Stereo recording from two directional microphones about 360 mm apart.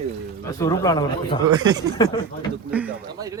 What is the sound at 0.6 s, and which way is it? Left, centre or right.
Speech, centre.